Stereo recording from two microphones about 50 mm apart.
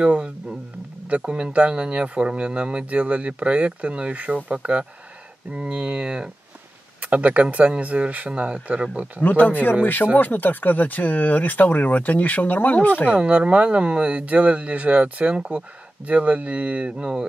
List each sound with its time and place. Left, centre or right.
0.0 s speech: right
9.2 s speech: left
13.2 s speech: right